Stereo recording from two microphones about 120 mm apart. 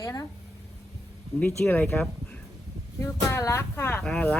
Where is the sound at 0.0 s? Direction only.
30° left (ahead or behind).